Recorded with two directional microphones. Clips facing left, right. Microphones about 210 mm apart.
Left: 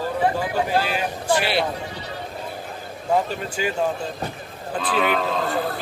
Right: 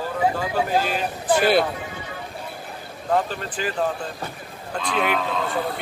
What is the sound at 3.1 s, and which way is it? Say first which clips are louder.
Speech: left 1 dB; 10° left (ahead or behind).